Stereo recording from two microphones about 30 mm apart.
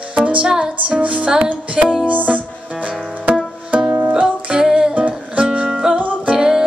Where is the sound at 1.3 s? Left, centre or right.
Right.